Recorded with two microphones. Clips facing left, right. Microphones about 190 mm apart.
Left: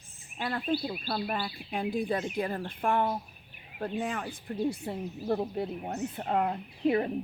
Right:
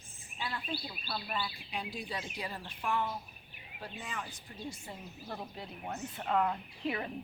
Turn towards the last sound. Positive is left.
turn(degrees=35)  # may be behind; listen again after turning